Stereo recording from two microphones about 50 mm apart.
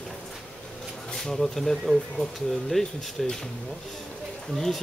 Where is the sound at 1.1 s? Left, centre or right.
Centre.